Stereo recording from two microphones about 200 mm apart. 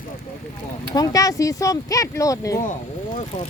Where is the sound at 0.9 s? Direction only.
20° left (ahead or behind).